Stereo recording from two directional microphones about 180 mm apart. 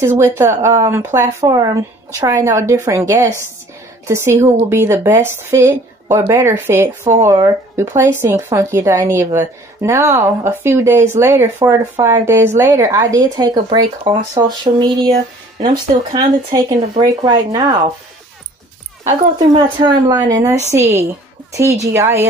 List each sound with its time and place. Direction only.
0.0 s speech: 15° right (ahead or behind)
19.3 s speech: 25° right (ahead or behind)
21.9 s speech: 15° right (ahead or behind)